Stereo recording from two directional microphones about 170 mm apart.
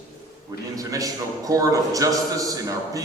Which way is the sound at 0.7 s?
20° right (ahead or behind).